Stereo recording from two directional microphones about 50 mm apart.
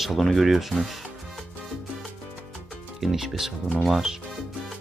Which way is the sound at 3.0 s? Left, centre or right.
Centre.